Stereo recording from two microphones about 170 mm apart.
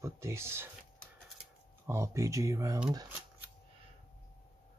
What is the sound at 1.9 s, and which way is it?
Speech, 15° right (ahead or behind).